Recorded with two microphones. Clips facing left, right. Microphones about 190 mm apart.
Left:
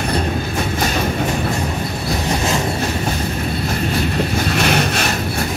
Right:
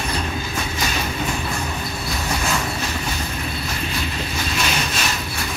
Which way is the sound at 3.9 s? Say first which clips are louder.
Left 8 dB; 55° left (ahead or behind).